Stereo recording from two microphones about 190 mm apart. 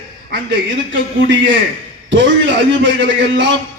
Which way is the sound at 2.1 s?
75° right (ahead or behind).